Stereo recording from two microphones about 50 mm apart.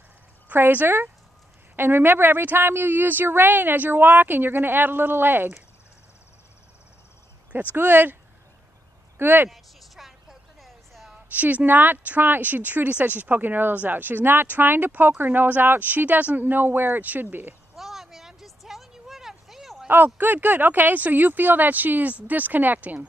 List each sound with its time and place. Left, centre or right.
0.5 s a woman's voice: right
7.7 s speech: right
9.2 s a woman's voice: right
9.5 s a sound: centre
11.3 s a woman's voice: right
17.7 s a sound: centre
19.9 s speech: right